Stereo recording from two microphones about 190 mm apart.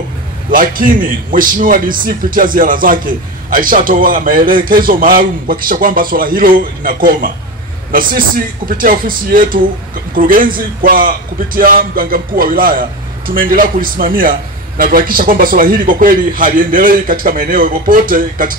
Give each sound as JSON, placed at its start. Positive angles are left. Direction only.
{"t": 0.5, "sound": "a man's voice", "side_deg": -45}